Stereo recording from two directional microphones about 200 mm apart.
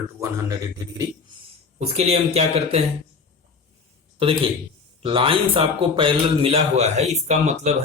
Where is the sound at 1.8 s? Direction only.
30° right (ahead or behind).